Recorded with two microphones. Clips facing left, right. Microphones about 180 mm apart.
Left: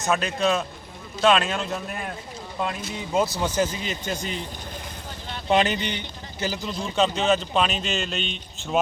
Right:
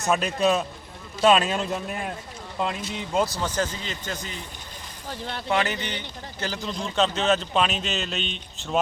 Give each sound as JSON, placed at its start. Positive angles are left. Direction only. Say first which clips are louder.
{"t": 0.1, "sound": "speech", "louder": "right 1 dB", "side_deg": 0}
{"t": 2.6, "sound": "speech", "louder": "right 1 dB", "side_deg": 0}
{"t": 5.5, "sound": "speech", "louder": "left 4 dB", "side_deg": 20}